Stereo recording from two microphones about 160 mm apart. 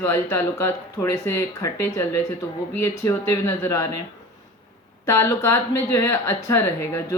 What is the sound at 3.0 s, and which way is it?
Speech, 15° left (ahead or behind).